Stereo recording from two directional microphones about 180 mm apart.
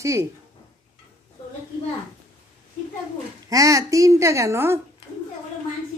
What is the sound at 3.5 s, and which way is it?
Speech, 20° right (ahead or behind).